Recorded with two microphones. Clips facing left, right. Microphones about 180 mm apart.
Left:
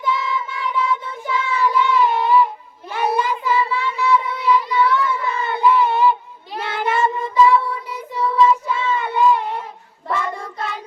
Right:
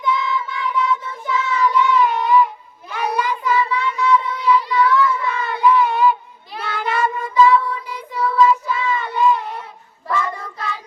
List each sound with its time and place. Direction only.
0.0 s child singing: 25° left (ahead or behind)